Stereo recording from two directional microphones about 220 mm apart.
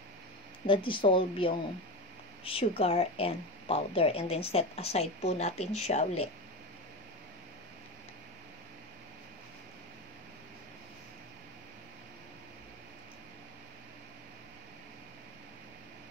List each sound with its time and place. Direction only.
0.7 s speech: 25° left (ahead or behind)